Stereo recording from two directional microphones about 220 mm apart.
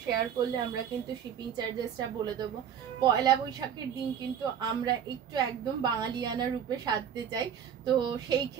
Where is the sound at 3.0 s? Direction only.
15° right (ahead or behind).